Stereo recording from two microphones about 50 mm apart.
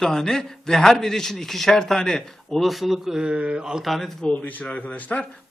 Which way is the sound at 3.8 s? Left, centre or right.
Centre.